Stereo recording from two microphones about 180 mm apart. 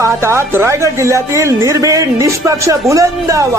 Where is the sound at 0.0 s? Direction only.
15° right (ahead or behind).